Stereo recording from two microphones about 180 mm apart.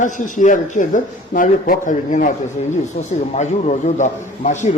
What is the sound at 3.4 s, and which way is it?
A man's voice, 40° left (ahead or behind).